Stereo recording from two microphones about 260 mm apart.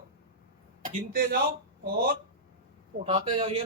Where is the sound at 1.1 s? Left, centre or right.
Right.